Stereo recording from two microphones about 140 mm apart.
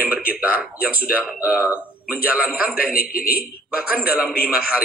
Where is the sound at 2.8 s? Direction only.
90° left.